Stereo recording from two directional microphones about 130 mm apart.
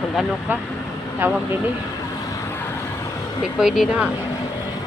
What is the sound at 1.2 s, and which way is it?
Speech, 15° right (ahead or behind).